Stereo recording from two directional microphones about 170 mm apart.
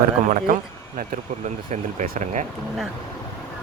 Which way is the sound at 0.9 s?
50° right (ahead or behind).